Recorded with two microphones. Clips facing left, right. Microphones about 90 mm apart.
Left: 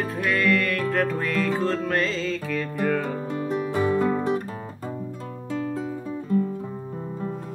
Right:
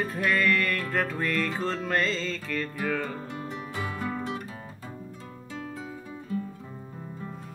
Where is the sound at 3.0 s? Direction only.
15° left (ahead or behind); by 4.2 s 35° left (ahead or behind).